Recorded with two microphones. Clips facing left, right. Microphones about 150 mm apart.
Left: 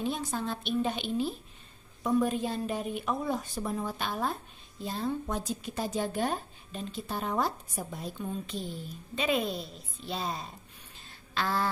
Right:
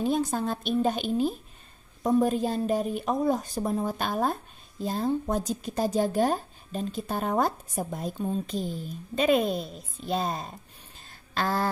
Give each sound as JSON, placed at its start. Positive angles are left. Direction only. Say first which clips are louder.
{"t": 0.0, "sound": "a woman's voice", "louder": "right 6 dB", "side_deg": -45}